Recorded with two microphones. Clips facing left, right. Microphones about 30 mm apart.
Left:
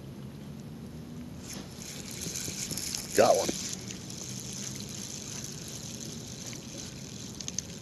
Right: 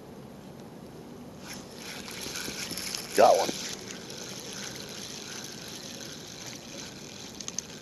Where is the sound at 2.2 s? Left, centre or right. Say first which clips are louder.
Right 2 dB; right.